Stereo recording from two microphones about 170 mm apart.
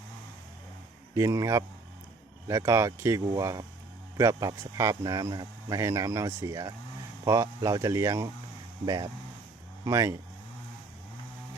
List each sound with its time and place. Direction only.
1.1 s speech: 20° right (ahead or behind)
9.8 s speech: 20° right (ahead or behind)